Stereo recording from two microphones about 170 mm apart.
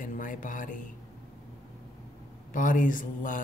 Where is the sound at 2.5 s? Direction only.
50° left (ahead or behind).